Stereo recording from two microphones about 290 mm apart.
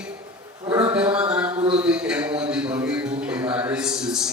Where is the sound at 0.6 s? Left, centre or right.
Centre.